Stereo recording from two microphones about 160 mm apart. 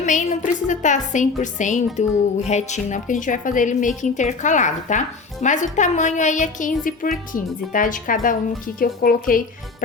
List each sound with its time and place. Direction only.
0.0 s a woman's voice: 50° left (ahead or behind)